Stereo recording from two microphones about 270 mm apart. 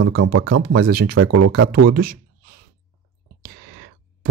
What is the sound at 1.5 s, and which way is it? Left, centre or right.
Speech, right.